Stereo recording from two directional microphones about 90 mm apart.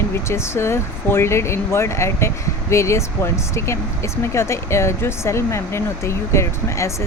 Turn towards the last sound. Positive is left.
turn(degrees=35)  # may be behind; listen again after turning